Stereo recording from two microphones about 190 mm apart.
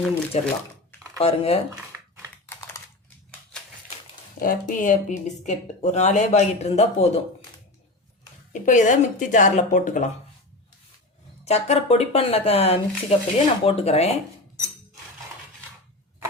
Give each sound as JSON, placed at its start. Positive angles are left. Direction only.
{"t": 0.1, "sound": "speech", "side_deg": 10}
{"t": 1.2, "sound": "speech", "side_deg": 30}
{"t": 1.7, "sound": "a sound", "side_deg": -10}
{"t": 2.5, "sound": "typing", "side_deg": 15}
{"t": 4.4, "sound": "a woman's voice", "side_deg": 45}
{"t": 8.6, "sound": "a woman's voice", "side_deg": 40}
{"t": 11.4, "sound": "a woman's voice", "side_deg": 35}